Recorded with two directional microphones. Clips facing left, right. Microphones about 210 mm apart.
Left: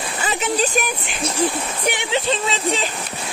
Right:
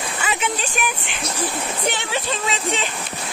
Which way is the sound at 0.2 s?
35° left (ahead or behind).